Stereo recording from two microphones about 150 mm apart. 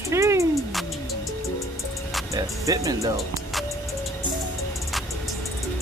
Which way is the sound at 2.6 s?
20° right (ahead or behind).